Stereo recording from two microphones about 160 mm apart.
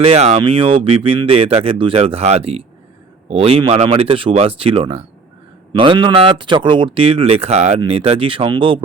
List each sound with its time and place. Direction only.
0.0 s speech: 35° right (ahead or behind)